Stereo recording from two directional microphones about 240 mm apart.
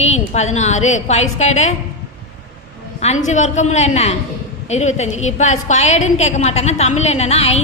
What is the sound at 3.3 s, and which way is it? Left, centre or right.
A man's voice, left.